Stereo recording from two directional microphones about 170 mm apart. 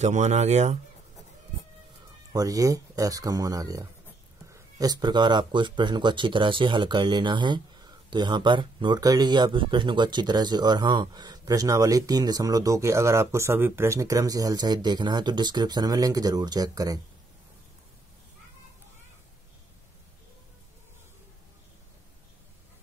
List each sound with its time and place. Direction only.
0.0 s speech: 40° right (ahead or behind)
2.3 s speech: 20° right (ahead or behind)